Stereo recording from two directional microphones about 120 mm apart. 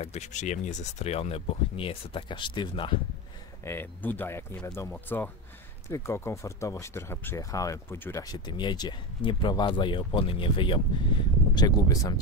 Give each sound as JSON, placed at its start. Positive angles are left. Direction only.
{"t": 0.0, "sound": "speech", "side_deg": 70}
{"t": 3.6, "sound": "speech", "side_deg": 20}
{"t": 4.9, "sound": "speech", "side_deg": 10}
{"t": 5.9, "sound": "speech", "side_deg": 25}